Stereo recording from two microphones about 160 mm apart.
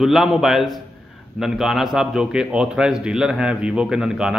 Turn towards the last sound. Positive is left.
turn(degrees=-5)  # may be behind; listen again after turning